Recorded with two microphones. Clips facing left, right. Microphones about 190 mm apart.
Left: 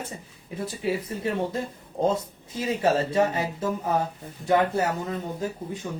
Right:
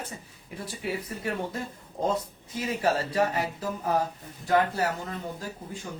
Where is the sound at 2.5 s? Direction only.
25° left (ahead or behind).